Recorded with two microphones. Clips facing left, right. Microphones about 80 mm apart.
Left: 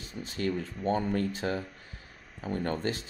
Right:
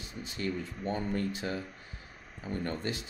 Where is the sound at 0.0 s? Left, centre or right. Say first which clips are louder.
Left 2 dB; left.